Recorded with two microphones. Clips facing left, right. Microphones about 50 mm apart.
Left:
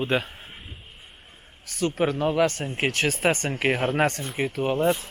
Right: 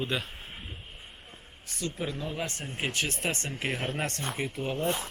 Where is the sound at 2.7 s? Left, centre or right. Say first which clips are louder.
Left 6 dB; left.